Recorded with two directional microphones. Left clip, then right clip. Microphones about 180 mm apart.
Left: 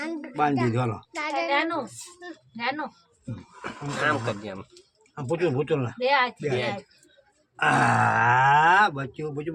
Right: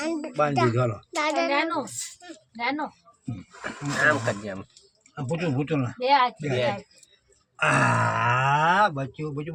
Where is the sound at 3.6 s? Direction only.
Centre (ahead or behind).